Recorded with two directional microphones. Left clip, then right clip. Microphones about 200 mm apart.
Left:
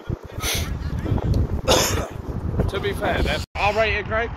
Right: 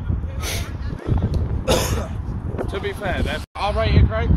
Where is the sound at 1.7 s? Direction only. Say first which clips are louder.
Left 2 dB; 40° right (ahead or behind).